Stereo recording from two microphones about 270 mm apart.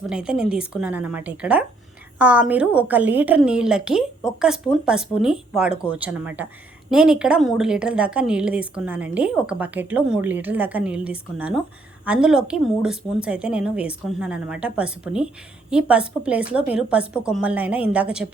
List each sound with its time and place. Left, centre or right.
0.1 s a woman's voice: centre